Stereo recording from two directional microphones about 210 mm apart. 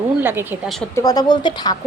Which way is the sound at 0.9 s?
15° left (ahead or behind).